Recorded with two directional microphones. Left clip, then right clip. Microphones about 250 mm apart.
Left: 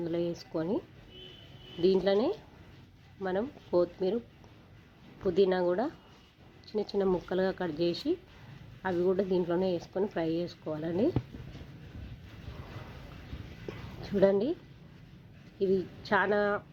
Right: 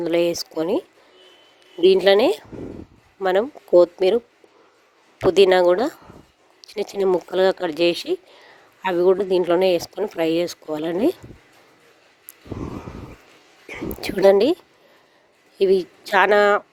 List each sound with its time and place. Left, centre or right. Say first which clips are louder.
0.0 s speech: right 14 dB; right
1.9 s speech: right 13 dB; right
5.3 s speech: right 13 dB; right
14.0 s speech: right 12 dB; right
15.5 s speech: right 12 dB; right